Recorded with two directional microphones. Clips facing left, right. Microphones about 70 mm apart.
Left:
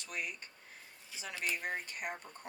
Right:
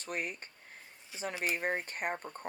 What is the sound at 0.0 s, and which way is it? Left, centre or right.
Speech, right.